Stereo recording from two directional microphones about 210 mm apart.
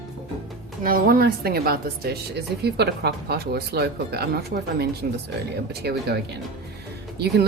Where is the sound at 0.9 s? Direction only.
45° right (ahead or behind).